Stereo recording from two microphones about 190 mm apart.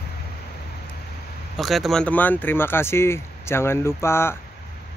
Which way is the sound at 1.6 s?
Centre (ahead or behind).